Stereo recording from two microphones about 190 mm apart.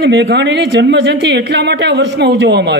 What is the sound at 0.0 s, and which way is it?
Speech, 65° right (ahead or behind).